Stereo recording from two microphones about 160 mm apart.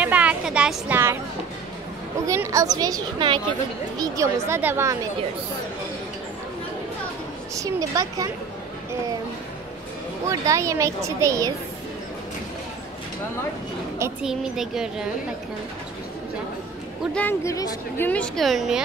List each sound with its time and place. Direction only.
0.0 s a sound: 10° right (ahead or behind)
2.2 s speech: 20° right (ahead or behind)
7.5 s speech: 20° right (ahead or behind)
10.2 s speech: 20° right (ahead or behind)
14.2 s speech: 5° right (ahead or behind)
17.1 s a woman's voice: 10° left (ahead or behind)